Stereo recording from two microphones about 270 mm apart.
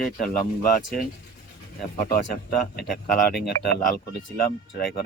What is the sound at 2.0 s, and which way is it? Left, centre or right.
Speech, left.